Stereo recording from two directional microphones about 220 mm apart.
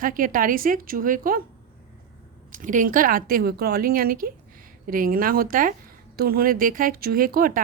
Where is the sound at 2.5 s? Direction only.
35° right (ahead or behind).